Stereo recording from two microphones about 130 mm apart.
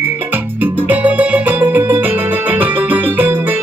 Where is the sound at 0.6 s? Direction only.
10° right (ahead or behind).